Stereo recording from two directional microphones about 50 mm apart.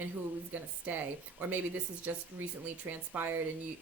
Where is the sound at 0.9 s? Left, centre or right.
Right.